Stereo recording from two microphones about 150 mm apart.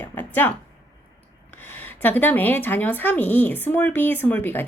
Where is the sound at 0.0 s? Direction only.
15° left (ahead or behind).